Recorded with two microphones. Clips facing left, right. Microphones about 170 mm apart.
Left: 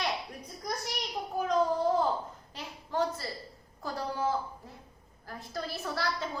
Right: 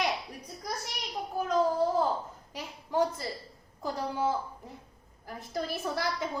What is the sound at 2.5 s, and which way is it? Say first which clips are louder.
Speech: right 4 dB; 15° right (ahead or behind).